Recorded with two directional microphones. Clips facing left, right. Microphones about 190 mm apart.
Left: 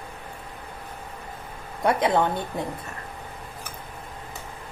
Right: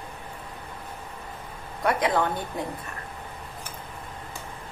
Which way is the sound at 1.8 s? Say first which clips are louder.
Left 2 dB; 25° left (ahead or behind).